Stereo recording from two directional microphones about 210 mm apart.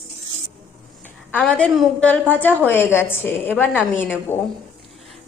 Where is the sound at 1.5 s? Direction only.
5° left (ahead or behind).